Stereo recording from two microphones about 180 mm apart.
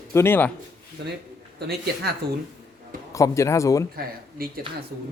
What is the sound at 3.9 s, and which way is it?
Speech, 55° right (ahead or behind).